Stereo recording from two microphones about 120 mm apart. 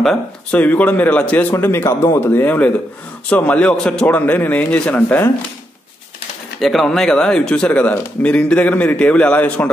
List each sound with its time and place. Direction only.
0.0 s speech: 5° left (ahead or behind)
6.6 s speech: centre (ahead or behind)